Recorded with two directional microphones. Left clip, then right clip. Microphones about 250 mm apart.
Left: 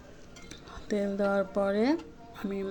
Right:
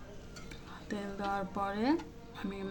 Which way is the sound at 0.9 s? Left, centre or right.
Centre.